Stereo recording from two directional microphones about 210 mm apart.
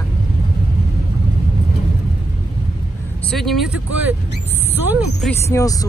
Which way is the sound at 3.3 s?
Centre (ahead or behind).